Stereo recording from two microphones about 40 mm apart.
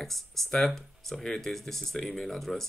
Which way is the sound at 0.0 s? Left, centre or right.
Centre.